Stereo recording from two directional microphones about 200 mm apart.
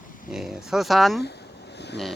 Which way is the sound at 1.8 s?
60° left (ahead or behind).